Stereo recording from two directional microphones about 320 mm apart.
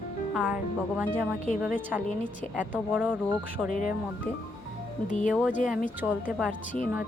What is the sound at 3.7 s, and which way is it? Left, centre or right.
Speech, left.